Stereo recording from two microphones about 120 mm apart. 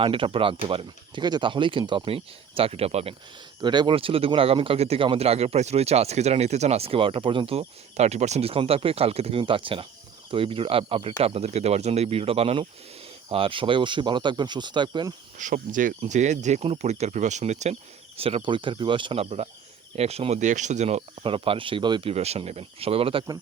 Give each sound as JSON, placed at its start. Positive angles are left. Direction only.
{"t": 0.0, "sound": "speech", "side_deg": -50}
{"t": 3.6, "sound": "speech", "side_deg": -40}
{"t": 9.4, "sound": "speech", "side_deg": -45}
{"t": 15.4, "sound": "speech", "side_deg": -90}
{"t": 18.2, "sound": "speech", "side_deg": -55}
{"t": 21.2, "sound": "speech", "side_deg": -50}
{"t": 22.1, "sound": "speech", "side_deg": -60}